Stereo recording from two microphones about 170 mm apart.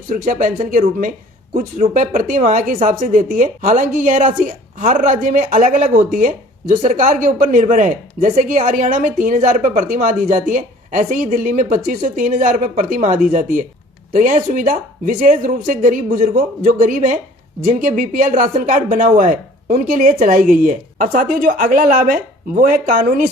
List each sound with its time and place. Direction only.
0.1 s speech: 50° right (ahead or behind)